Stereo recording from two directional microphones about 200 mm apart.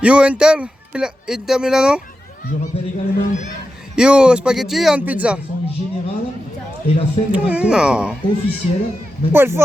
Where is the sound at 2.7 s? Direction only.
35° left (ahead or behind).